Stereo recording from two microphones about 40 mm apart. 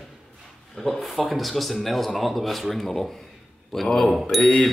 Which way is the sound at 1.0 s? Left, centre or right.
Centre.